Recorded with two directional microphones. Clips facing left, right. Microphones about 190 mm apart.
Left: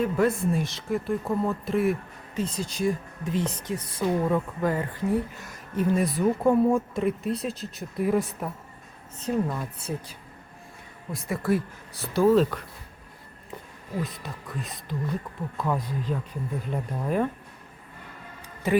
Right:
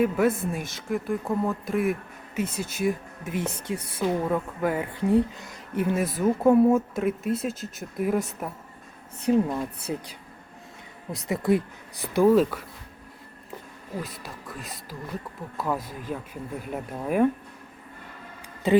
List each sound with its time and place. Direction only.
0.0 s speech: 5° right (ahead or behind)
9.2 s speech: 20° right (ahead or behind)
11.3 s speech: 20° right (ahead or behind)
14.0 s speech: 5° right (ahead or behind)